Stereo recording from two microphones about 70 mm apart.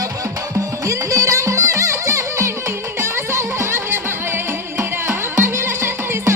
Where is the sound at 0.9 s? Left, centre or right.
Right.